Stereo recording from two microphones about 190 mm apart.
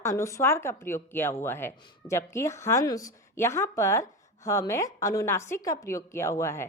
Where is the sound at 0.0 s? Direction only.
15° left (ahead or behind).